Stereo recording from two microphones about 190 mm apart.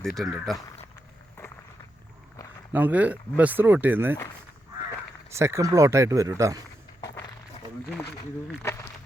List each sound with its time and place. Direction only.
0.0 s speech: centre (ahead or behind)
2.7 s speech: 10° right (ahead or behind)
5.3 s speech: 15° right (ahead or behind)
8.6 s a sound: 15° left (ahead or behind)